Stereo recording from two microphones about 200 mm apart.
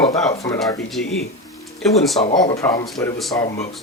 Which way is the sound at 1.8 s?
Centre (ahead or behind).